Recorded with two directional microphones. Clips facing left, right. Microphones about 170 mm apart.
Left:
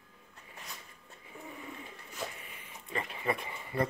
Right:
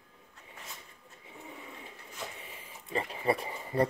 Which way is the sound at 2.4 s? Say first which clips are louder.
Right 2 dB; 30° right (ahead or behind).